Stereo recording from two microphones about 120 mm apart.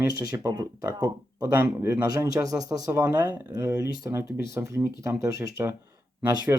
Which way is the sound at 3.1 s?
15° right (ahead or behind).